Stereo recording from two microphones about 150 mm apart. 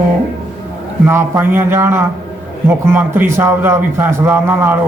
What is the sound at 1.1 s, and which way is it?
A man's voice, 15° right (ahead or behind).